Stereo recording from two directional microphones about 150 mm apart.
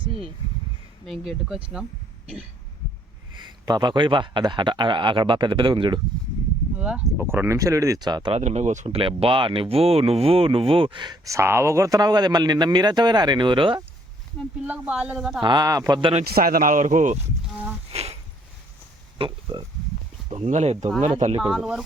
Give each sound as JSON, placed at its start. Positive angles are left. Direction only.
{"t": 1.0, "sound": "speech", "side_deg": 0}
{"t": 3.4, "sound": "speech", "side_deg": -30}
{"t": 6.7, "sound": "speech", "side_deg": -10}
{"t": 8.4, "sound": "speech", "side_deg": -50}
{"t": 9.0, "sound": "speech", "side_deg": -35}
{"t": 14.7, "sound": "speech", "side_deg": -10}
{"t": 15.4, "sound": "speech", "side_deg": -30}
{"t": 16.0, "sound": "speech", "side_deg": -35}
{"t": 16.3, "sound": "speech", "side_deg": -75}
{"t": 17.9, "sound": "a sound", "side_deg": -45}
{"t": 19.2, "sound": "speech", "side_deg": -30}
{"t": 20.3, "sound": "speech", "side_deg": -50}
{"t": 21.4, "sound": "speech", "side_deg": -5}